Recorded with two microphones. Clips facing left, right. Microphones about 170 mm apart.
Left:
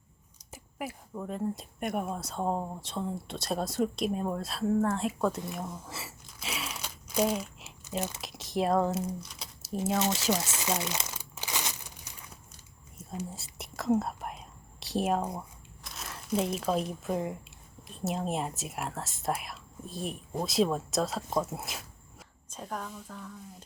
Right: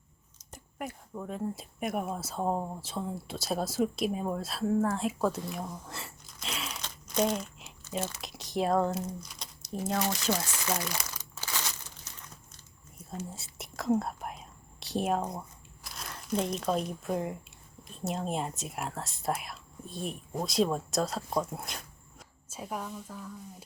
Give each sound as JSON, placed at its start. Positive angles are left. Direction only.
{"t": 0.5, "sound": "speech", "side_deg": 5}
{"t": 10.5, "sound": "speech", "side_deg": 20}
{"t": 11.2, "sound": "crumpling", "side_deg": 15}
{"t": 13.3, "sound": "whispering", "side_deg": 0}
{"t": 15.8, "sound": "speech", "side_deg": 0}
{"t": 22.4, "sound": "speech", "side_deg": -5}